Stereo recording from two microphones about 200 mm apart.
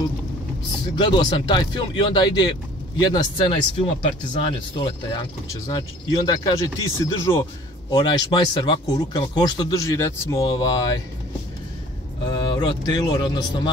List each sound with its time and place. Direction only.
0.9 s speech: 25° left (ahead or behind)
12.3 s speech: 20° left (ahead or behind)